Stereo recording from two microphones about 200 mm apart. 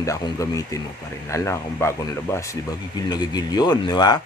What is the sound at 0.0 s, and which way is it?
A man's voice, 15° left (ahead or behind).